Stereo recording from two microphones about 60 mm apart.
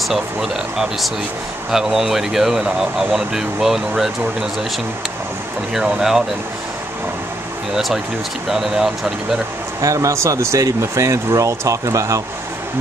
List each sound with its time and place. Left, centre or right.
0.1 s speech: centre
5.7 s speech: centre
8.5 s speech: centre
9.8 s speech: right